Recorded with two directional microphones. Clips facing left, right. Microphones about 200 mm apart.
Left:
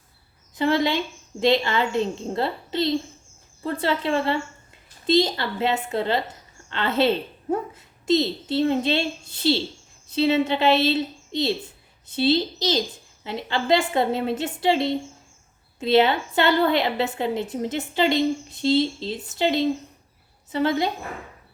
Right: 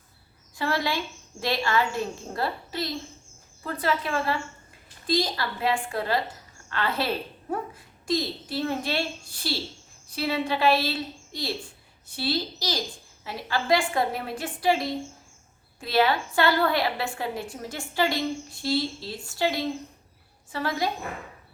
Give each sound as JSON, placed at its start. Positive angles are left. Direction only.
{"t": 0.5, "sound": "a woman's voice", "side_deg": 20}